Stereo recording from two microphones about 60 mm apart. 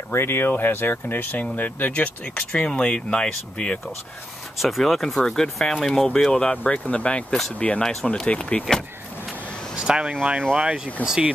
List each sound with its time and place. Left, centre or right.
0.1 s speech: left; by 3.8 s centre
4.6 s speech: centre; by 7.8 s left
7.8 s speech: centre
8.1 s speech: centre
9.8 s speech: centre
11.0 s speech: left